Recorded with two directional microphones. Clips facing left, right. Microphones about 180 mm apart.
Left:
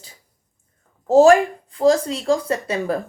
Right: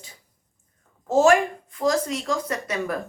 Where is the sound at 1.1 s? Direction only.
35° left (ahead or behind).